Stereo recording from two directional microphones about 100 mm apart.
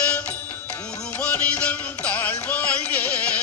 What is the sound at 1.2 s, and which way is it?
Music, 10° left (ahead or behind).